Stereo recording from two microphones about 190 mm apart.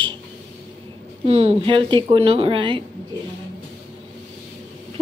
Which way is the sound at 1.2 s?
30° right (ahead or behind).